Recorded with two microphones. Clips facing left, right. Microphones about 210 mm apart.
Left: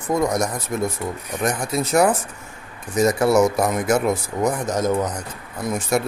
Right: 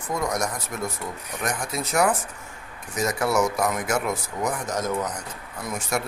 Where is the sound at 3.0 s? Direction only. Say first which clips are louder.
Left 7 dB; 30° left (ahead or behind).